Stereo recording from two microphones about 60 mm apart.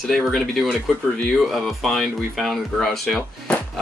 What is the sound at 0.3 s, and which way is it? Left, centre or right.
Speech, centre.